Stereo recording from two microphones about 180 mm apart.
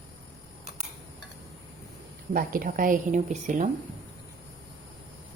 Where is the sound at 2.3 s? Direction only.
50° right (ahead or behind).